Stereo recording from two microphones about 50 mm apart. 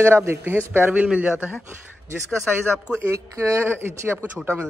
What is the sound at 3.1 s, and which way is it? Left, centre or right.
Speech, right.